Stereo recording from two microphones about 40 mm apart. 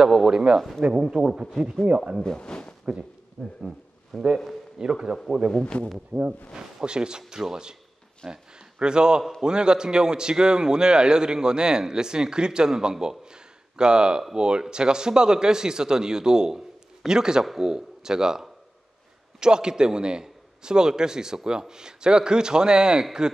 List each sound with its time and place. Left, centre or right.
0.0 s speech: centre
0.6 s speech: centre
1.1 s speech: centre
1.9 s speech: right
2.2 s speech: left
4.8 s speech: centre
5.5 s speech: left
6.1 s speech: right
6.5 s a man's voice: right